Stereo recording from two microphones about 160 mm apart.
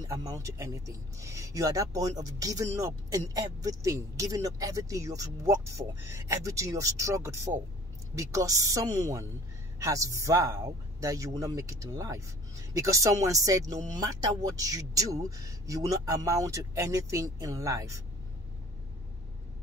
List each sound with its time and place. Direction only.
0.0 s speech: 20° right (ahead or behind)